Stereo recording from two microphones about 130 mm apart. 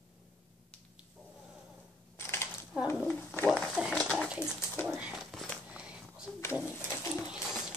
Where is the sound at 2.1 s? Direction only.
20° left (ahead or behind).